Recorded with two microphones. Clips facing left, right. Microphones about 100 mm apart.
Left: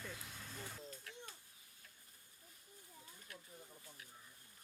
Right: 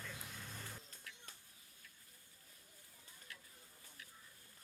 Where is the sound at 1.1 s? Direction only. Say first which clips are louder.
Left 4 dB; 30° left (ahead or behind).